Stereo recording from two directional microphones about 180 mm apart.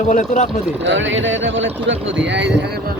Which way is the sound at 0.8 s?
90° right.